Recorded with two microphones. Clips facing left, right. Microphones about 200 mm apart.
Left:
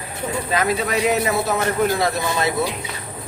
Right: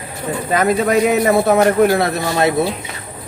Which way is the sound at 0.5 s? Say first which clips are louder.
Right 7 dB; 50° right (ahead or behind).